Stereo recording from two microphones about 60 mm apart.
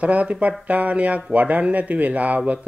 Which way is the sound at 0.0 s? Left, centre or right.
Right.